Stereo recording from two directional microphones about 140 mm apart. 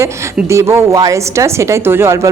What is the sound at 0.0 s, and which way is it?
A woman's voice, 20° right (ahead or behind).